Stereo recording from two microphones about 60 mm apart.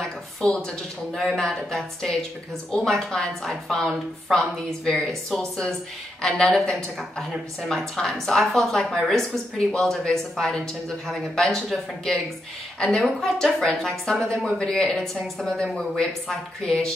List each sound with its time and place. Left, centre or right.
0.4 s a woman's voice: centre